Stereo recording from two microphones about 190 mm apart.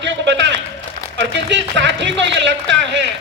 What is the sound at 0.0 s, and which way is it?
A man's voice, 70° right (ahead or behind).